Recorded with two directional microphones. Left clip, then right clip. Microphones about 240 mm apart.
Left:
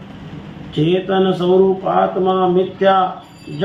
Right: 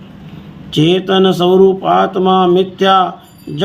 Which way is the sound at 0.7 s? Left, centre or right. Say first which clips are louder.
Right 5 dB; right.